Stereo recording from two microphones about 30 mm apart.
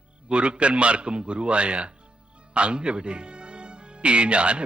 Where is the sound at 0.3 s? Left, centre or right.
Right.